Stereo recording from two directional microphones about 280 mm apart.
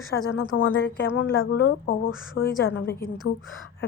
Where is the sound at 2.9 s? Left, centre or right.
Centre.